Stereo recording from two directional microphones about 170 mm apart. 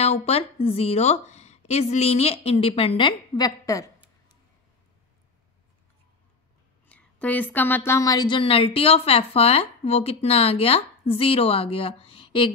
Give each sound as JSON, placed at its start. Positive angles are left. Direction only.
{"t": 0.0, "sound": "a woman's voice", "side_deg": 40}
{"t": 6.9, "sound": "a woman's voice", "side_deg": 10}